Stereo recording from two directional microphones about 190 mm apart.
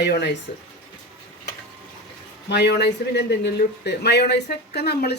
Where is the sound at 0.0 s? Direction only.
60° left (ahead or behind).